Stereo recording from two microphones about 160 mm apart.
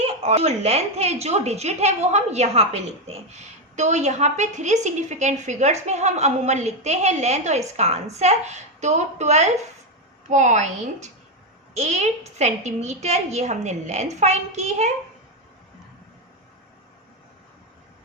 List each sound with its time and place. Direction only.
0.0 s a woman's voice: 40° right (ahead or behind)